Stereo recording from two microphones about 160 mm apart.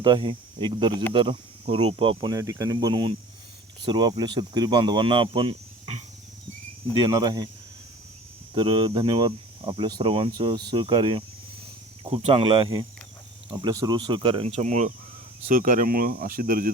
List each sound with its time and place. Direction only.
0.0 s speech: 30° right (ahead or behind)
8.5 s speech: 30° right (ahead or behind); by 14.9 s 45° right (ahead or behind)
15.5 s speech: 60° right (ahead or behind)